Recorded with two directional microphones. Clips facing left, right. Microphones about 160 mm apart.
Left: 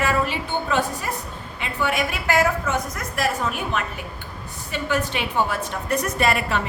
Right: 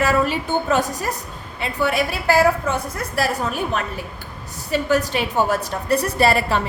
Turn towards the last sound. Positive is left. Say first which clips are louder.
# right 4 dB
turn(degrees=-35)  # may be behind; listen again after turning